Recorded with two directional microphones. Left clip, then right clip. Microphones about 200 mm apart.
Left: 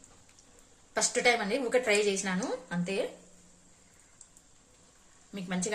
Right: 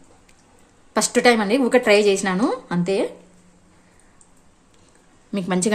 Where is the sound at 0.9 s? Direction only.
55° right (ahead or behind).